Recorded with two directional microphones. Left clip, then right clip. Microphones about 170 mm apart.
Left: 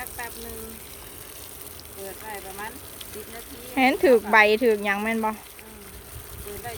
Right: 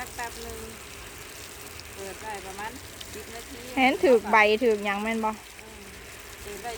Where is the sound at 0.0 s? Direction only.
10° left (ahead or behind).